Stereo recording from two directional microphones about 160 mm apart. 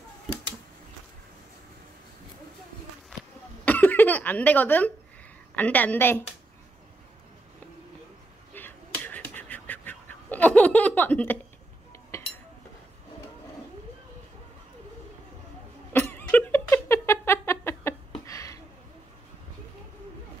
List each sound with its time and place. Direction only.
3.6 s cough: 10° left (ahead or behind)
5.6 s a woman's voice: 10° left (ahead or behind)
8.5 s finger snapping: 10° left (ahead or behind)
15.9 s a sound: 15° left (ahead or behind)